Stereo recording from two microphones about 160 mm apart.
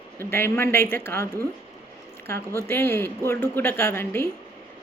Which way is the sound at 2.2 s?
15° left (ahead or behind).